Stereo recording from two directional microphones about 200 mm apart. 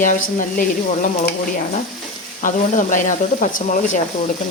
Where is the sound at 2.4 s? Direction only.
40° left (ahead or behind).